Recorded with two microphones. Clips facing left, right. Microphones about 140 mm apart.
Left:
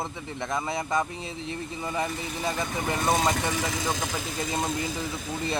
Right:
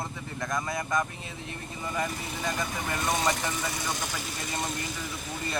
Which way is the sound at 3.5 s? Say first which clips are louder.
Left 4 dB; 90° left.